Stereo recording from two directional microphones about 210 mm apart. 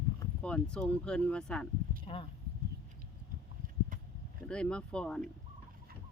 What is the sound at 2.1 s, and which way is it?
Speech, 30° left (ahead or behind).